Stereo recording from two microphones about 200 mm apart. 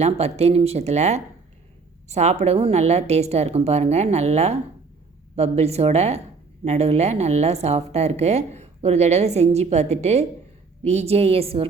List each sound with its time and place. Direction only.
0.0 s a woman's voice: 30° right (ahead or behind)